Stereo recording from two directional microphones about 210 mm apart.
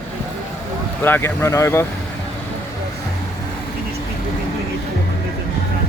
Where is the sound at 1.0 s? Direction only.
10° left (ahead or behind).